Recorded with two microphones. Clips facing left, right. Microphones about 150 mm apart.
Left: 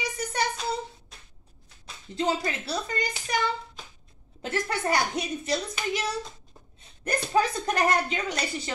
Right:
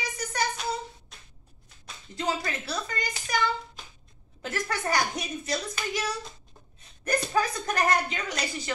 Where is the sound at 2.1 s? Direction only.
30° left (ahead or behind).